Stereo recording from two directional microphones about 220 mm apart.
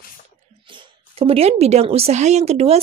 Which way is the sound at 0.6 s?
20° right (ahead or behind).